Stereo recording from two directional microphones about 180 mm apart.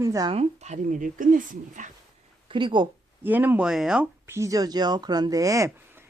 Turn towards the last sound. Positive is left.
turn(degrees=-15)  # may be behind; listen again after turning